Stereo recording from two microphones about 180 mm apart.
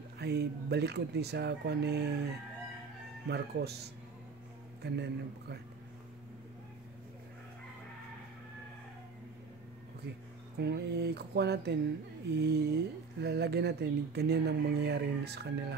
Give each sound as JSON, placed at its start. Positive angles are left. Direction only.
{"t": 0.2, "sound": "speech", "side_deg": -65}
{"t": 3.3, "sound": "speech", "side_deg": -65}
{"t": 10.6, "sound": "speech", "side_deg": -65}